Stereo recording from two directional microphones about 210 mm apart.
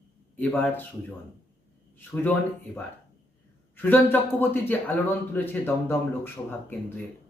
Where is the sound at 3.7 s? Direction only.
10° left (ahead or behind).